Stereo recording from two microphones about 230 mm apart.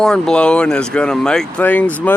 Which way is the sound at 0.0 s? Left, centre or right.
Centre.